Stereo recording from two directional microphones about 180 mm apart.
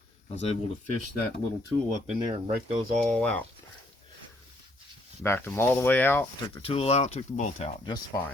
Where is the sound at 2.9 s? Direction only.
5° left (ahead or behind).